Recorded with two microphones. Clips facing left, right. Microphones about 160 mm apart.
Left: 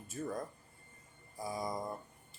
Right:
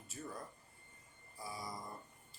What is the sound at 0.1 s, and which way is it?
Speech, 50° left (ahead or behind).